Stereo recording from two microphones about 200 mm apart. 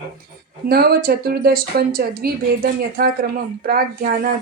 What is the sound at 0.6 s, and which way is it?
Speech, 50° right (ahead or behind).